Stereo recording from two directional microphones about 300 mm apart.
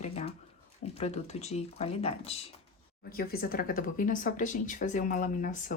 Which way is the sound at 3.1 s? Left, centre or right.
Left.